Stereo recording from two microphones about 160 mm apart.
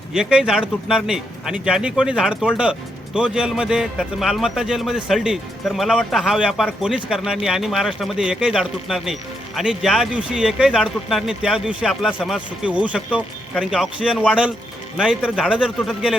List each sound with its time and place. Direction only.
0.1 s a man's voice: 5° right (ahead or behind)